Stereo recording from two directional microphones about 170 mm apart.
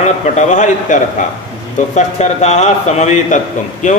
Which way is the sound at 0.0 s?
45° left (ahead or behind).